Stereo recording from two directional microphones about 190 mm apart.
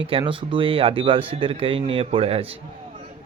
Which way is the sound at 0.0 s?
30° right (ahead or behind).